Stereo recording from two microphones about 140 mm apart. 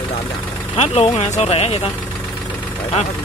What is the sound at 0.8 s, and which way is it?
Speech, 50° left (ahead or behind).